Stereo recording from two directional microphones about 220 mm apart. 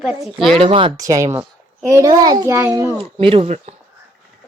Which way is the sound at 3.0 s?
25° right (ahead or behind).